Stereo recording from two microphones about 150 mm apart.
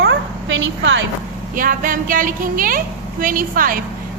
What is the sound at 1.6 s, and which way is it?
A woman's voice, 65° right (ahead or behind).